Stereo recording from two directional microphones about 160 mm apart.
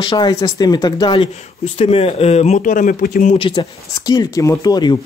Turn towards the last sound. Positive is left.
turn(degrees=25)  # may be behind; listen again after turning